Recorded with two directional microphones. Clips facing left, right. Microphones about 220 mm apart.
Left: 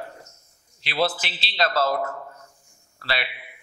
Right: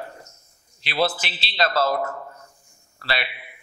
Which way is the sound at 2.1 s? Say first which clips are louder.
Right 1 dB; 25° right (ahead or behind).